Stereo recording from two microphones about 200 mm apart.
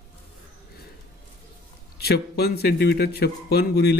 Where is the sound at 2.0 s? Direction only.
50° left (ahead or behind).